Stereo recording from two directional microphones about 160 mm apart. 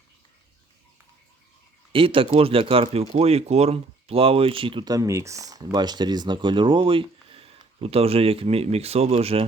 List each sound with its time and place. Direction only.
1.9 s speech: 35° right (ahead or behind)